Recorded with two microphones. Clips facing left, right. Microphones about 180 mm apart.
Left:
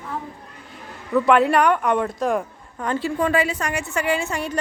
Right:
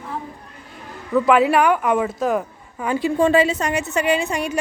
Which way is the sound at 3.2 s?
25° right (ahead or behind).